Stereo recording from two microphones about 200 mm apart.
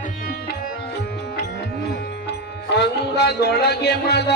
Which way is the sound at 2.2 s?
55° left (ahead or behind).